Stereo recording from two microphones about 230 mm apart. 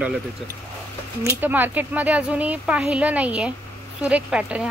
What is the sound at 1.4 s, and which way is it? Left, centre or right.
Speech, centre.